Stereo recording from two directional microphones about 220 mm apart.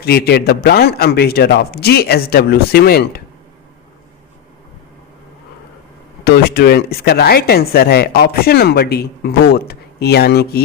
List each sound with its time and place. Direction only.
0.0 s speech: 45° left (ahead or behind)
6.2 s speech: 45° left (ahead or behind)